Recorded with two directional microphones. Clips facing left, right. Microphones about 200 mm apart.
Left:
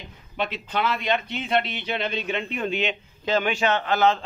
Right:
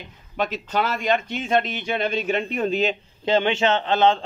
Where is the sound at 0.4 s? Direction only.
45° right (ahead or behind).